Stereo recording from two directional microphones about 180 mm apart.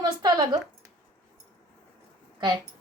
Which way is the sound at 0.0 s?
20° right (ahead or behind).